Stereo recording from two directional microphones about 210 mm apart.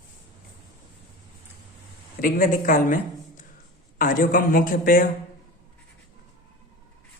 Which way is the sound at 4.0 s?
40° left (ahead or behind).